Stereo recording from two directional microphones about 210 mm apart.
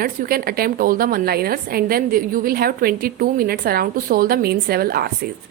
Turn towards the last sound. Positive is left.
turn(degrees=-45)  # may be behind; listen again after turning